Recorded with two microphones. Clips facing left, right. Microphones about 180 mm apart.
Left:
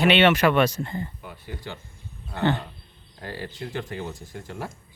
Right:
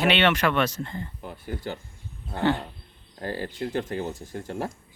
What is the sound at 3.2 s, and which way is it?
Speech, 40° right (ahead or behind).